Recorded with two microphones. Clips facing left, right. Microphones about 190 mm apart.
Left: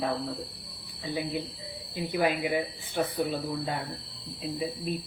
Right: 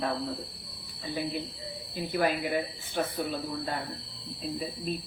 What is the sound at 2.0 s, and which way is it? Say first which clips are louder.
Speech: left 1 dB; 15° left (ahead or behind).